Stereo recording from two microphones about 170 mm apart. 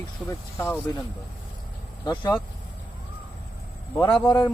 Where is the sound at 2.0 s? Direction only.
25° left (ahead or behind).